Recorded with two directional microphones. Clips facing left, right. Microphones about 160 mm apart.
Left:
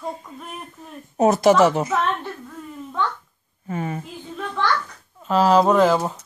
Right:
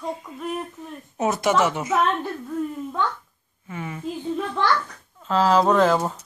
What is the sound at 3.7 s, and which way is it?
Speech, 40° left (ahead or behind).